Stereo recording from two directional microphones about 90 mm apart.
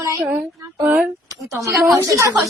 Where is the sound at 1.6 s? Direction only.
35° right (ahead or behind).